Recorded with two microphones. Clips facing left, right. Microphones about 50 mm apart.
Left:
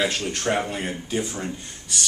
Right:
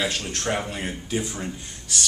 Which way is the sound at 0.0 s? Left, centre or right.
Centre.